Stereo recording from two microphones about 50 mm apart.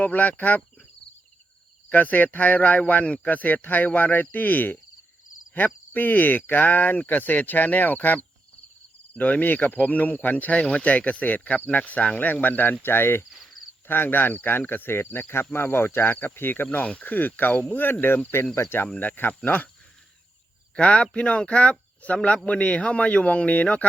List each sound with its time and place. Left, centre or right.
0.0 s speech: left
1.9 s speech: left
13.3 s cricket: centre
13.8 s speech: left
16.8 s speech: left
17.1 s speech: left
18.5 s speech: left
18.9 s speech: left
20.7 s speech: left